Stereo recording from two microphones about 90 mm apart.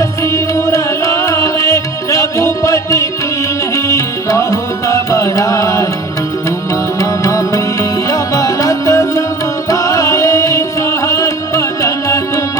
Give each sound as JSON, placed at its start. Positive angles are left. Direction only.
{"t": 0.0, "sound": "music", "side_deg": 35}
{"t": 7.0, "sound": "music", "side_deg": 40}